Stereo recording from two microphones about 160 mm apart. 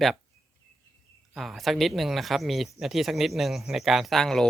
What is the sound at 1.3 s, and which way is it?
Speech, centre (ahead or behind).